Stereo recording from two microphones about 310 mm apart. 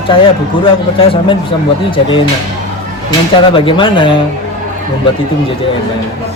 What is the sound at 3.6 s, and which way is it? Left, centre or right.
Speech, centre.